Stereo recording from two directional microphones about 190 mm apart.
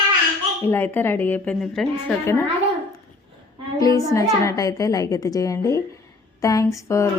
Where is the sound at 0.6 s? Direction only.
10° left (ahead or behind).